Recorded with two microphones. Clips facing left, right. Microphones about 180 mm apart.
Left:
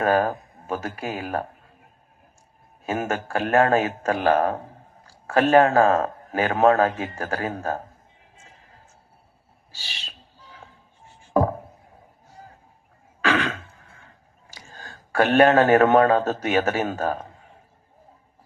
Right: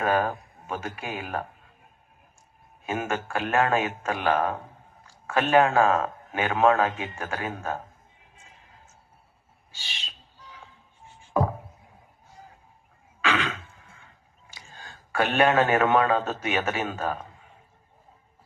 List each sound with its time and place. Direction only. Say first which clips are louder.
0.0 s speech: left 4 dB; 40° left (ahead or behind)
2.8 s speech: left 3 dB; 40° left (ahead or behind)
9.7 s owl: left 1 dB; 40° left (ahead or behind)
11.2 s a sound: left 5 dB; 45° left (ahead or behind)
13.2 s a sound: left 4 dB; 40° left (ahead or behind)
14.5 s speech: left 3 dB; 40° left (ahead or behind)